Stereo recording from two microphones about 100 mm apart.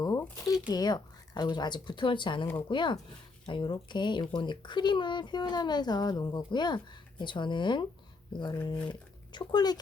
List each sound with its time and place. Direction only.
0.0 s shuffling cards: 35° left (ahead or behind)
0.7 s speech: 40° left (ahead or behind)